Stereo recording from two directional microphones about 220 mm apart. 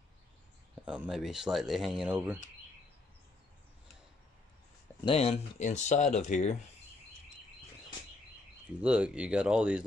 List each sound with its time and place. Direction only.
0.8 s speech: 5° right (ahead or behind)
5.0 s speech: 25° left (ahead or behind)
8.8 s speech: 5° right (ahead or behind)